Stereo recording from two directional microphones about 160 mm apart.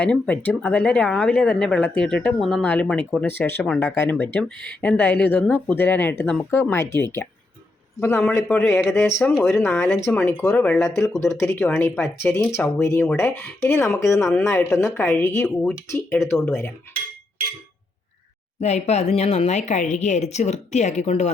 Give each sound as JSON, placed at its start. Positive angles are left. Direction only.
{"t": 0.0, "sound": "speech", "side_deg": 10}
{"t": 9.5, "sound": "speech", "side_deg": 15}
{"t": 11.0, "sound": "speech", "side_deg": 20}
{"t": 18.6, "sound": "a woman's voice", "side_deg": 45}